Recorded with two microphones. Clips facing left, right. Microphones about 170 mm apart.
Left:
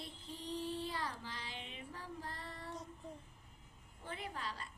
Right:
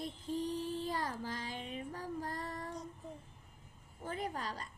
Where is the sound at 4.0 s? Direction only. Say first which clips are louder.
Right 6 dB; 40° right (ahead or behind).